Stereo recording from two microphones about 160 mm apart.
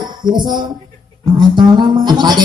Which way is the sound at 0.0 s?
25° right (ahead or behind).